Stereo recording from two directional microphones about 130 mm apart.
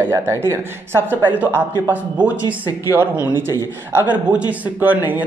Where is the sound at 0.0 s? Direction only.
20° right (ahead or behind).